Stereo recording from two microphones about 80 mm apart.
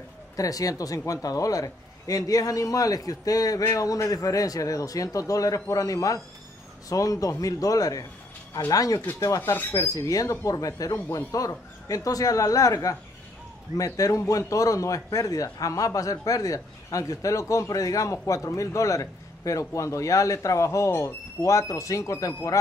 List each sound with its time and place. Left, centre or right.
0.4 s speech: left